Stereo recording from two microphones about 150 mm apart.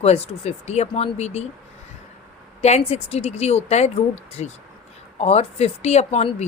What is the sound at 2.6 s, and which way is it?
Speech, 45° left (ahead or behind).